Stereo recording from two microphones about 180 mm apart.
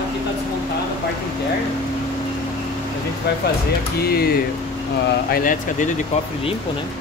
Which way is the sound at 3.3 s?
65° left (ahead or behind).